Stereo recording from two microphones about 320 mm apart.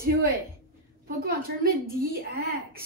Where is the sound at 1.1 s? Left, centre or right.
Right.